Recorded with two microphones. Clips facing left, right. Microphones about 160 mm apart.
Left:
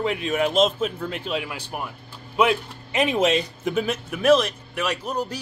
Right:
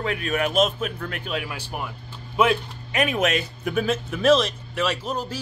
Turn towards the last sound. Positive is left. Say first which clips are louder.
# even
turn(degrees=15)  # may be behind; listen again after turning